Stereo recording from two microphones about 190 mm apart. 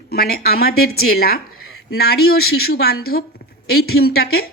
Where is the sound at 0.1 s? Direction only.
55° left (ahead or behind).